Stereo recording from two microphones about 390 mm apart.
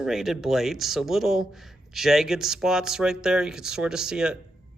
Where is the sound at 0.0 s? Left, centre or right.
Centre.